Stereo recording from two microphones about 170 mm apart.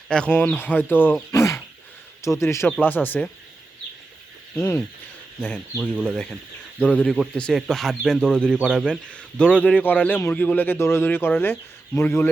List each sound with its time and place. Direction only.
0.1 s a man's voice: 5° left (ahead or behind)
4.5 s a man's voice: 10° left (ahead or behind)
5.7 s a man's voice: centre (ahead or behind); by 12.3 s 15° left (ahead or behind)